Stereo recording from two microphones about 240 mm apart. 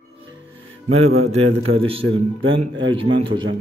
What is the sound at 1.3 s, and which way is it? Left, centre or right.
Speech, right.